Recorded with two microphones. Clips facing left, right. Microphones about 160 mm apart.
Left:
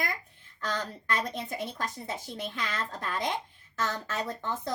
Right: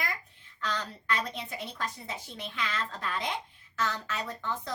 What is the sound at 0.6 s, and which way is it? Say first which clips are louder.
A woman's voice: left 2 dB; 45° left (ahead or behind).